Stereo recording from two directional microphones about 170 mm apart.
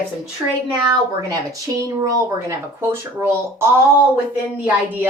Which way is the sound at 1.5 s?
20° right (ahead or behind).